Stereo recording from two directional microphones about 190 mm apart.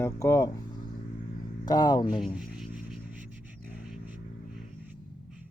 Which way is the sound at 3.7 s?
5° right (ahead or behind).